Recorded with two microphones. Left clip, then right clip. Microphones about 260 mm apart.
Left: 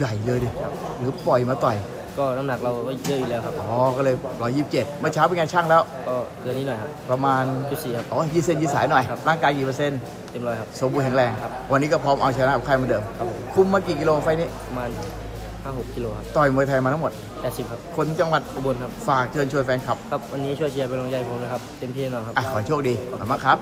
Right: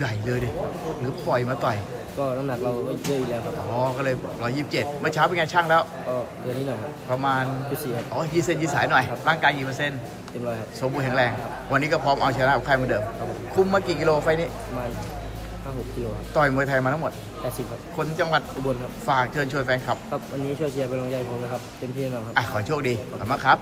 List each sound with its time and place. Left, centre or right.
0.3 s a man's voice: centre
2.1 s speech: centre
3.8 s a man's voice: centre
7.1 s a man's voice: centre
16.6 s a man's voice: centre
22.1 s a man's voice: centre